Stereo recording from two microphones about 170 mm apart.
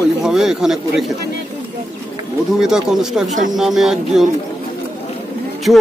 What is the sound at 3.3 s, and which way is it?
Speech, 45° right (ahead or behind).